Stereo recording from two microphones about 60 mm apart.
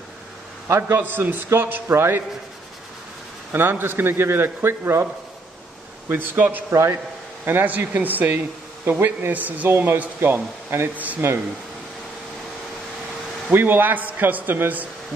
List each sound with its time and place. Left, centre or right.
0.7 s a man's voice: right
3.5 s a man's voice: right
6.0 s a man's voice: right
6.7 s speech: right
7.4 s speech: right
8.9 s a man's voice: right
9.3 s speech: right
10.2 s a man's voice: right
13.5 s a man's voice: right